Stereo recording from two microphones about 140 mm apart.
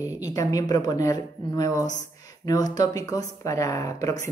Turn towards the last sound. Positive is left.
turn(degrees=25)  # may be behind; listen again after turning